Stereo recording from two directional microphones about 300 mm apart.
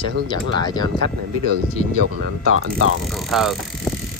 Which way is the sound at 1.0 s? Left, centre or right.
Right.